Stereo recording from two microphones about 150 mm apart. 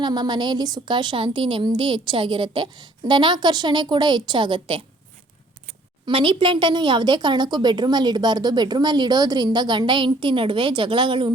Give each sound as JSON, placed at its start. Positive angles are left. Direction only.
{"t": 0.0, "sound": "a woman's voice", "side_deg": -30}
{"t": 6.1, "sound": "a woman's voice", "side_deg": -35}